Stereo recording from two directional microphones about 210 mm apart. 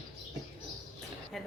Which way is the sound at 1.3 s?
Centre (ahead or behind).